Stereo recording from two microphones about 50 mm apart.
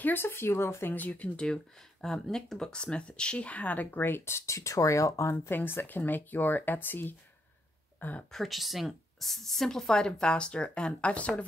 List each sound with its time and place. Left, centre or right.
0.0 s speech: left
0.9 s speech: left
1.3 s speech: centre; by 5.5 s left
5.5 s speech: left
8.3 s a woman's voice: centre; by 11.4 s left